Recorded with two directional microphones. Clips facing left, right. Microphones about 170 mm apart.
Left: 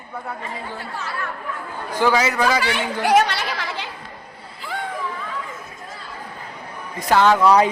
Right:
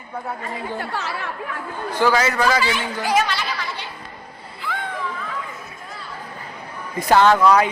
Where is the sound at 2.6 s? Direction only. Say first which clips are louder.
Left 3 dB; 65° left (ahead or behind).